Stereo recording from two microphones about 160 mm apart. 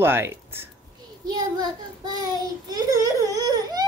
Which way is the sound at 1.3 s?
25° right (ahead or behind).